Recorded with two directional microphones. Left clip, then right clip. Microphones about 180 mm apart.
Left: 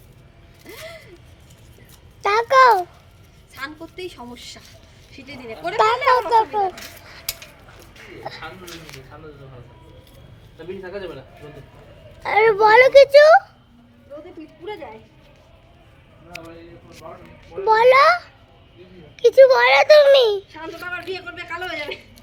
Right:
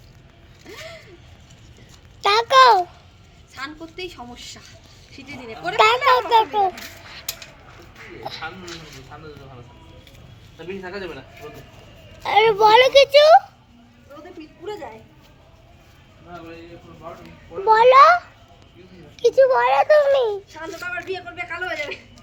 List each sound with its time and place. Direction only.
2.2 s a sound: centre (ahead or behind)
5.1 s a child's voice: centre (ahead or behind)
8.3 s a child's voice: 5° left (ahead or behind)
12.2 s a child's voice: 5° left (ahead or behind)
17.7 s a child's voice: centre (ahead or behind)
19.1 s a child's voice: 10° left (ahead or behind)
20.5 s a child's voice: 5° left (ahead or behind)
21.7 s a woman's voice: 20° right (ahead or behind)